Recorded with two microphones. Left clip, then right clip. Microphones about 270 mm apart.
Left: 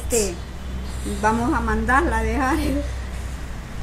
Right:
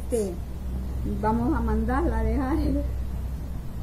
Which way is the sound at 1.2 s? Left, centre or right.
Centre.